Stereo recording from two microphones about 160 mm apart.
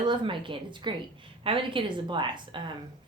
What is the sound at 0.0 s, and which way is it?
Speech, 30° right (ahead or behind).